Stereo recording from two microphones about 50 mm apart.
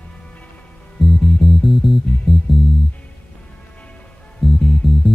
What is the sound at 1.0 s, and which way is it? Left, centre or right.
Music, centre.